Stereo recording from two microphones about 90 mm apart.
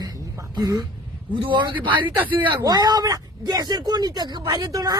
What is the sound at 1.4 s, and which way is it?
Speech, 60° right (ahead or behind).